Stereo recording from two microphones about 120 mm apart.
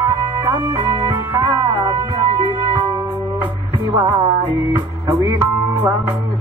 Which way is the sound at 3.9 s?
30° right (ahead or behind).